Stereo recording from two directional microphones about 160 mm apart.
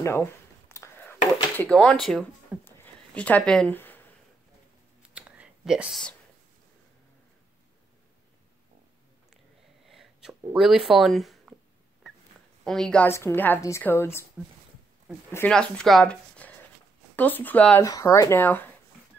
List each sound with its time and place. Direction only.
0.0 s a sound: 15° left (ahead or behind)
1.6 s speech: 5° left (ahead or behind)
2.6 s a sound: 10° left (ahead or behind)
5.0 s whispering: 5° right (ahead or behind)
9.8 s sneeze: centre (ahead or behind)
10.4 s speech: 5° right (ahead or behind)
12.6 s a woman's voice: 5° left (ahead or behind)
15.3 s a woman's voice: 5° left (ahead or behind)
17.8 s speech: 20° left (ahead or behind)